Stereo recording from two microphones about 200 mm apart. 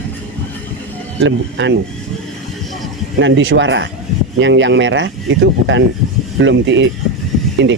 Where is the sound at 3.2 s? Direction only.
70° right (ahead or behind).